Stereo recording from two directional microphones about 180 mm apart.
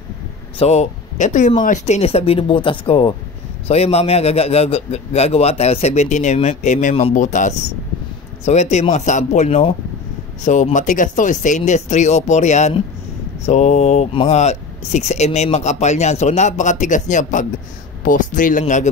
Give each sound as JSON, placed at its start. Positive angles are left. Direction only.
{"t": 0.6, "sound": "speech", "side_deg": 40}